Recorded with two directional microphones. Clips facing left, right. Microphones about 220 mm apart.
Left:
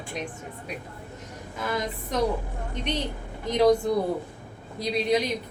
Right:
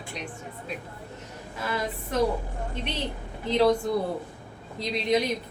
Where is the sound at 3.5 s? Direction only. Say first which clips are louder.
Left 1 dB; 15° left (ahead or behind).